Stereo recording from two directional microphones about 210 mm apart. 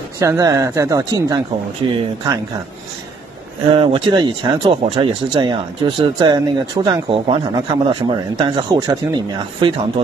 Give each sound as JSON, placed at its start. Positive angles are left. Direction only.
{"t": 0.2, "sound": "speech", "side_deg": -15}
{"t": 3.7, "sound": "speech", "side_deg": -25}